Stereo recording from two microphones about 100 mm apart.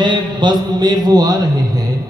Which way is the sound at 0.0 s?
50° right (ahead or behind).